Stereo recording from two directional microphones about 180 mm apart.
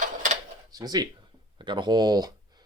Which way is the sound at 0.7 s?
20° right (ahead or behind).